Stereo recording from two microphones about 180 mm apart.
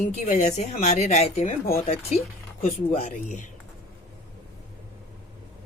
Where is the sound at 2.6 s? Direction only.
40° left (ahead or behind).